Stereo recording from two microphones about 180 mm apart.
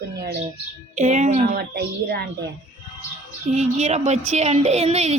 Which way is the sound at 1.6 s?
60° right (ahead or behind).